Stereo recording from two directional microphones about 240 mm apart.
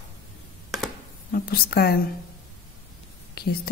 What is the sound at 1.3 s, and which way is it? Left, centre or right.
Speech, left.